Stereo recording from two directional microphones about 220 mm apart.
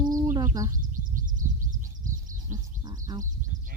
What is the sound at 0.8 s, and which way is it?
Bird, 40° right (ahead or behind).